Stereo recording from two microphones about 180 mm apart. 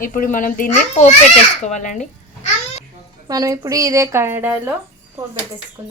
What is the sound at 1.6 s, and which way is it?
Babbling, 40° left (ahead or behind).